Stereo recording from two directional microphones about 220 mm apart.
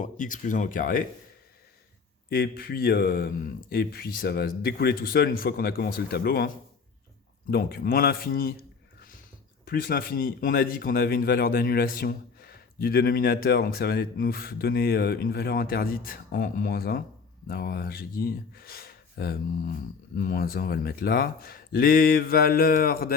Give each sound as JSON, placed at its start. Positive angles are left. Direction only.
{"t": 0.0, "sound": "speech", "side_deg": 35}
{"t": 2.3, "sound": "speech", "side_deg": 40}
{"t": 7.5, "sound": "speech", "side_deg": 45}
{"t": 9.6, "sound": "speech", "side_deg": 40}